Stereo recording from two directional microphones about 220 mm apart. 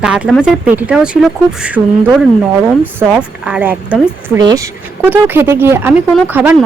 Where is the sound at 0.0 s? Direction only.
5° right (ahead or behind).